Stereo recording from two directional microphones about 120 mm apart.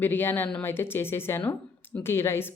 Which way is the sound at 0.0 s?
15° left (ahead or behind).